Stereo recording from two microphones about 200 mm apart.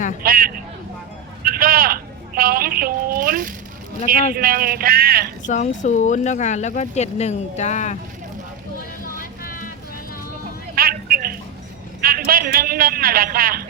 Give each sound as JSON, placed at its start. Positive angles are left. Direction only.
{"t": 0.2, "sound": "a woman's voice", "side_deg": -45}
{"t": 5.5, "sound": "speech", "side_deg": 40}
{"t": 9.1, "sound": "vehicle", "side_deg": 45}
{"t": 10.8, "sound": "a sound", "side_deg": -50}
{"t": 11.9, "sound": "a man's voice", "side_deg": -45}